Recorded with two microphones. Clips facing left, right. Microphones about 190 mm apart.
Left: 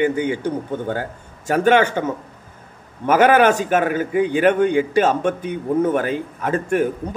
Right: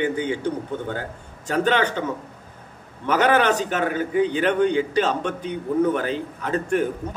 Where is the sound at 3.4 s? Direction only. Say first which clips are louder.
Left 5 dB; 10° left (ahead or behind).